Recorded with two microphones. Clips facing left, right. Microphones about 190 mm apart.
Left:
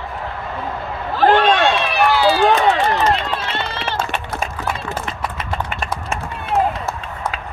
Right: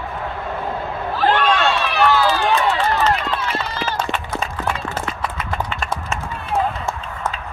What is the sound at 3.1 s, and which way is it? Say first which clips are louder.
Run: left 1 dB; 25° left (ahead or behind).